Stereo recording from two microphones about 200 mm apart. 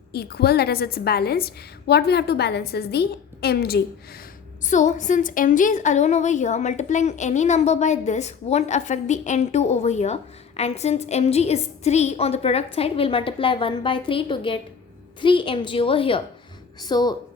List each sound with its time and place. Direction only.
0.1 s a woman's voice: 50° left (ahead or behind)
4.6 s a woman's voice: 40° left (ahead or behind); by 17.2 s 20° left (ahead or behind)